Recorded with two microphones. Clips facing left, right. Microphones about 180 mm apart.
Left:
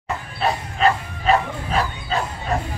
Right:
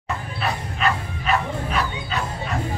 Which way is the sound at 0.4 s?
30° left (ahead or behind).